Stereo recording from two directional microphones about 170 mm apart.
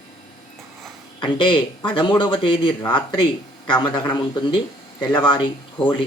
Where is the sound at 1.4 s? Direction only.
30° left (ahead or behind).